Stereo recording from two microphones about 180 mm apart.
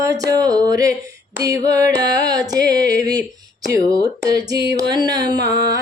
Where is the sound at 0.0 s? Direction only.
15° right (ahead or behind).